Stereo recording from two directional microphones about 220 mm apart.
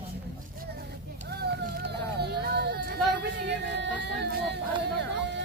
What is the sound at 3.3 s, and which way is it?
Music, 50° right (ahead or behind).